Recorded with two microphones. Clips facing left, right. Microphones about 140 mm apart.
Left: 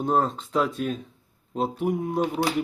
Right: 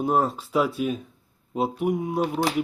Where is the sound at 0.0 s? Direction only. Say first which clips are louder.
Right 1 dB; 5° right (ahead or behind).